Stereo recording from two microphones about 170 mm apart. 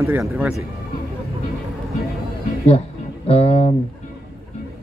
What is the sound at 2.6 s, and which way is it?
Speech, 40° left (ahead or behind).